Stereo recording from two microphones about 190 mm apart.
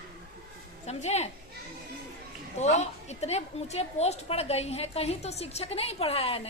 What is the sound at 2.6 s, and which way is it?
A woman's voice, 35° left (ahead or behind).